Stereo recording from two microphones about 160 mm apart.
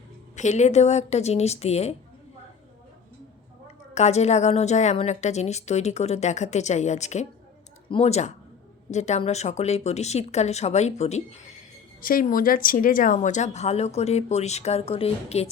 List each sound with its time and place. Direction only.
0.3 s a woman's voice: 45° left (ahead or behind)
3.9 s a woman's voice: 45° left (ahead or behind)
11.9 s a woman's voice: 60° left (ahead or behind)
13.1 s a woman's voice: 50° left (ahead or behind)